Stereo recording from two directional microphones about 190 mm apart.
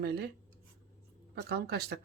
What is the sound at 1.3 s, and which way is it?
Speech, 55° right (ahead or behind).